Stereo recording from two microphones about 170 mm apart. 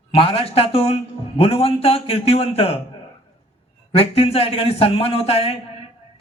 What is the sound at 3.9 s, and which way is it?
A man's voice, 35° left (ahead or behind).